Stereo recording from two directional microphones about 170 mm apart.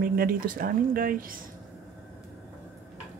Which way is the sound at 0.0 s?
60° right (ahead or behind).